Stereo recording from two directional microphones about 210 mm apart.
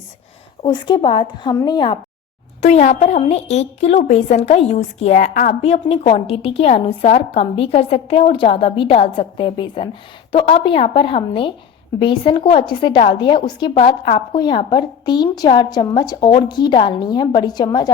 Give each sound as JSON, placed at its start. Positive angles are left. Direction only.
{"t": 0.6, "sound": "a woman's voice", "side_deg": 20}
{"t": 2.6, "sound": "a woman's voice", "side_deg": 30}